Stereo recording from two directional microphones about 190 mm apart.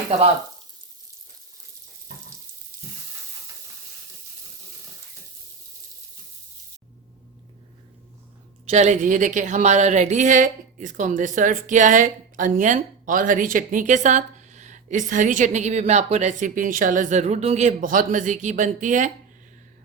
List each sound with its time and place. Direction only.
8.6 s speech: 35° right (ahead or behind)